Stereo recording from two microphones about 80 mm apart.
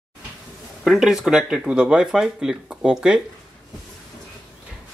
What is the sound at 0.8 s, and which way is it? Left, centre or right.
Speech, centre.